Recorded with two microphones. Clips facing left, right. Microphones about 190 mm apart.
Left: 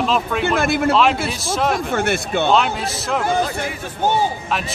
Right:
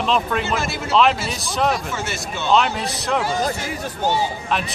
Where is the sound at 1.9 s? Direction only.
60° left (ahead or behind).